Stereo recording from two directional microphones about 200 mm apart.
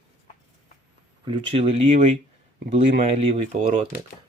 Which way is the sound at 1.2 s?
25° right (ahead or behind).